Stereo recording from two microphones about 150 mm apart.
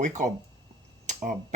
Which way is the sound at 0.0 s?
55° right (ahead or behind).